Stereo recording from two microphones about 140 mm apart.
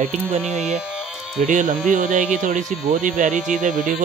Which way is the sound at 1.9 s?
65° right (ahead or behind).